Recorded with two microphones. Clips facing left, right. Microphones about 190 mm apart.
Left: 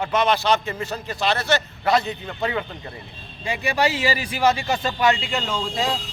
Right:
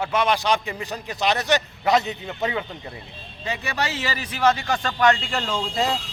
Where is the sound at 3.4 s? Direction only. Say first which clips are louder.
Left 5 dB; 10° left (ahead or behind).